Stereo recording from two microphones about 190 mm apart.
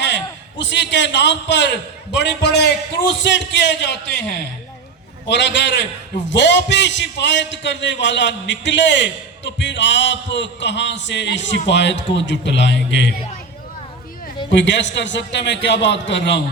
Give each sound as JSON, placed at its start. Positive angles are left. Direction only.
{"t": 0.6, "sound": "a man's voice", "side_deg": 70}
{"t": 14.5, "sound": "a man's voice", "side_deg": 70}